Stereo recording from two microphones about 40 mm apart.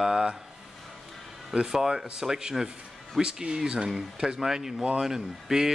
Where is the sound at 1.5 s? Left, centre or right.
Centre.